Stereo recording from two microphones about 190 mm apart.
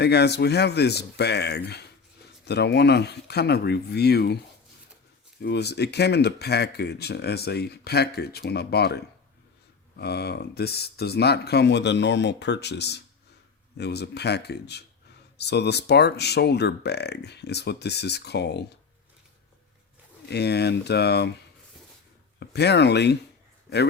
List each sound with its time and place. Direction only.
0.0 s speech: 60° left (ahead or behind)
5.4 s speech: 60° left (ahead or behind)
10.0 s speech: 60° left (ahead or behind)
20.2 s speech: 60° left (ahead or behind)
22.4 s speech: 60° left (ahead or behind)